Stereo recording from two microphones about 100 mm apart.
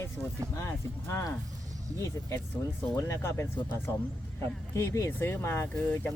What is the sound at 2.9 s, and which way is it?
Speech, 30° left (ahead or behind).